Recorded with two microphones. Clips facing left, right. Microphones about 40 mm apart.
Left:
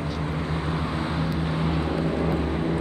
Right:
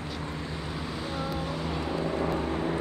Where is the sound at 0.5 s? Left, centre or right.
Left; by 2.8 s centre.